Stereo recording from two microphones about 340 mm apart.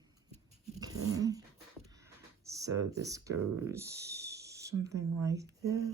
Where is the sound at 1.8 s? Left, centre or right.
Centre.